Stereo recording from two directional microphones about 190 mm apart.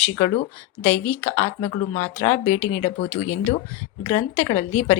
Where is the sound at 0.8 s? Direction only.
10° left (ahead or behind).